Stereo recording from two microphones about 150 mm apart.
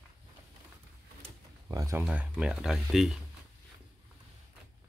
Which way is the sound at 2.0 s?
5° right (ahead or behind).